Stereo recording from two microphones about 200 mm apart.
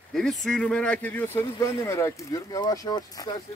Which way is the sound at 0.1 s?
Centre (ahead or behind).